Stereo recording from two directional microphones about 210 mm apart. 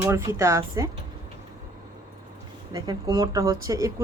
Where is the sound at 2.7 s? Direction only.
15° right (ahead or behind).